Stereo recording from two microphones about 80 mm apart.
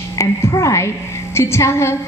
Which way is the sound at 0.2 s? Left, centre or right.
Left.